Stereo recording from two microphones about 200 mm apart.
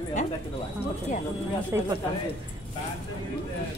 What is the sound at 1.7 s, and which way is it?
Speech, 15° right (ahead or behind).